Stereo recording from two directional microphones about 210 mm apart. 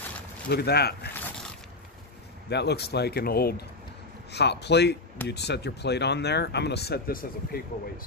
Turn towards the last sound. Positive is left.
turn(degrees=45)  # may be behind; listen again after turning